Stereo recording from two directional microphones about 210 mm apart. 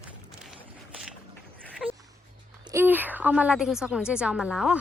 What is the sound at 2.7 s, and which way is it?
A woman's voice, 10° right (ahead or behind).